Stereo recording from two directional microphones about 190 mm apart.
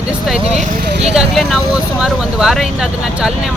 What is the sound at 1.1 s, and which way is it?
Speech, centre (ahead or behind).